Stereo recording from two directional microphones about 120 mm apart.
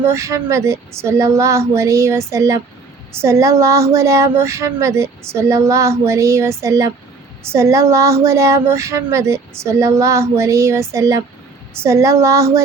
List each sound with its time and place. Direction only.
0.0 s speech: 25° right (ahead or behind)